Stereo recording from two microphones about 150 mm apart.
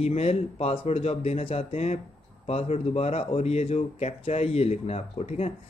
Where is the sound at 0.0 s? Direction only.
45° left (ahead or behind).